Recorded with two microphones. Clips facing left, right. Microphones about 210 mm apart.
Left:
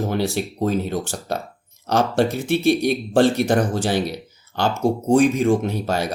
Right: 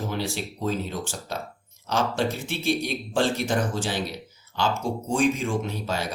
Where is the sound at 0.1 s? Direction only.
55° left (ahead or behind).